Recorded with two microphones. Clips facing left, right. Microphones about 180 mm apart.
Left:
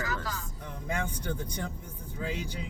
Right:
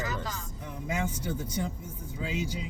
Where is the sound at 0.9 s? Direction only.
5° right (ahead or behind).